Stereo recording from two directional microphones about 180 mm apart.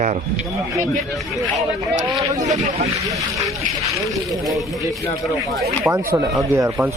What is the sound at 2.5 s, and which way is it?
Speech, 40° right (ahead or behind).